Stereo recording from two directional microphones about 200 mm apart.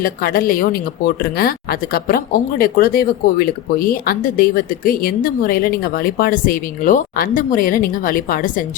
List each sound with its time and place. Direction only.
0.0 s speech: 45° left (ahead or behind)